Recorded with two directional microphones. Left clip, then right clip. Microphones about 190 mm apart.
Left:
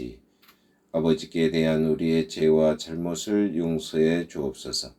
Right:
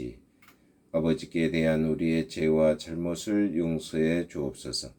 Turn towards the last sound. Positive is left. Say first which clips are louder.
# left 3 dB
turn(degrees=-40)  # may be behind; listen again after turning